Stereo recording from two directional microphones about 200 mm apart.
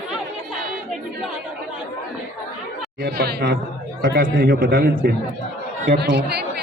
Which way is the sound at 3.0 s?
50° right (ahead or behind).